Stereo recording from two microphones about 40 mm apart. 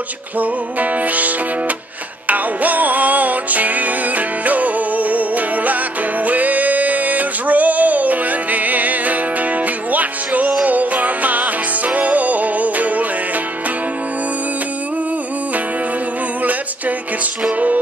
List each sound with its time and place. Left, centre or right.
0.4 s music: right